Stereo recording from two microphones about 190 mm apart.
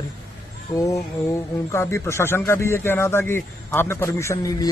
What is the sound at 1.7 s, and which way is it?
Speech, 15° left (ahead or behind).